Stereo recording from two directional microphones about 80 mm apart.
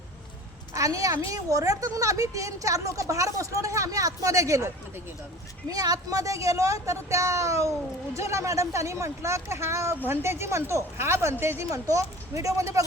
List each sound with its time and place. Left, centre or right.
0.7 s a woman's voice: right
11.7 s a woman's voice: right